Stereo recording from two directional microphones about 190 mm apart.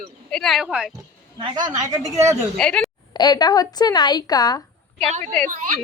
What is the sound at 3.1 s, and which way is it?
Speech, 20° left (ahead or behind).